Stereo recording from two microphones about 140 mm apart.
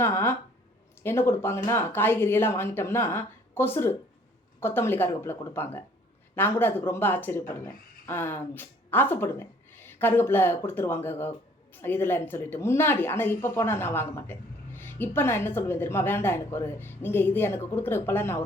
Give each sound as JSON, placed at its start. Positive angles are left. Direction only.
{"t": 0.0, "sound": "speech", "side_deg": 20}